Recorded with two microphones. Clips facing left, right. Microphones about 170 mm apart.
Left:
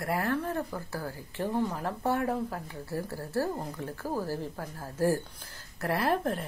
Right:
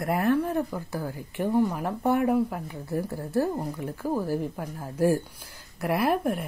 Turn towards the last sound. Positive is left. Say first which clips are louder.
# right 4 dB
turn(degrees=-10)  # may be behind; listen again after turning